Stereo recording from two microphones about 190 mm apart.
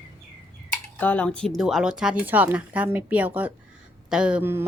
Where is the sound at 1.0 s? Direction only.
10° left (ahead or behind).